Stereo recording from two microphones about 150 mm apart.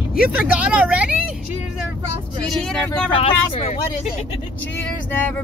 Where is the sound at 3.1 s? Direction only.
45° left (ahead or behind).